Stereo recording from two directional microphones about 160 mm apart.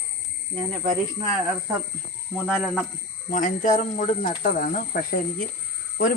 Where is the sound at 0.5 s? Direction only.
30° right (ahead or behind).